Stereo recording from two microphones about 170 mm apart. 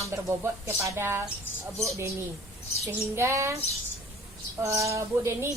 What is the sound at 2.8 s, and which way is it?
Speech, 15° right (ahead or behind).